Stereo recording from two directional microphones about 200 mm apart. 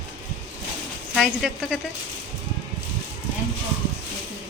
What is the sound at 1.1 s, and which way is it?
Speech, centre (ahead or behind).